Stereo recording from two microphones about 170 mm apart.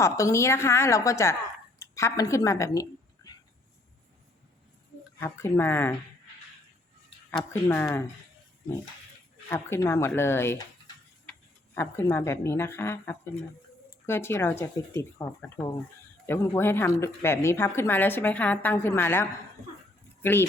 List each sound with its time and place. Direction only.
0.0 s a woman's voice: 15° left (ahead or behind)
5.2 s a woman's voice: 15° left (ahead or behind)
7.3 s a woman's voice: 15° left (ahead or behind)
9.5 s a woman's voice: 15° left (ahead or behind)